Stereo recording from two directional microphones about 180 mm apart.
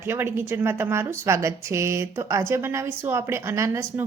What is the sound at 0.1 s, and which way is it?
A woman's voice, 10° right (ahead or behind).